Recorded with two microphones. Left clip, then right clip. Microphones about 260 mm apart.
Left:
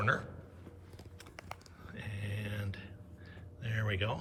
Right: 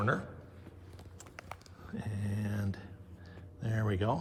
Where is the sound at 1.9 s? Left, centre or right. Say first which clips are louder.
Right 2 dB; centre.